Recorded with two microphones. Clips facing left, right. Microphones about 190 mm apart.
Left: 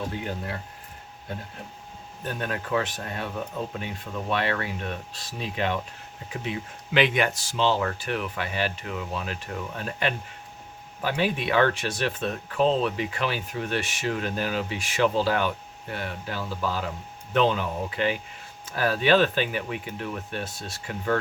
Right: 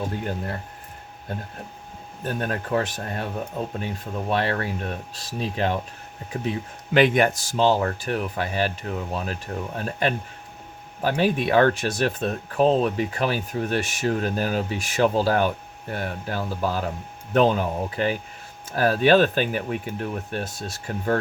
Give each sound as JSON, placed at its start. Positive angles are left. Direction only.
{"t": 2.2, "sound": "speech", "side_deg": -40}